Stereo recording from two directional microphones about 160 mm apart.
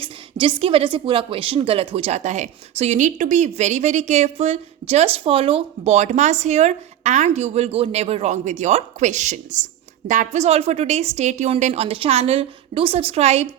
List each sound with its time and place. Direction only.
0.0 s a woman's voice: 30° right (ahead or behind)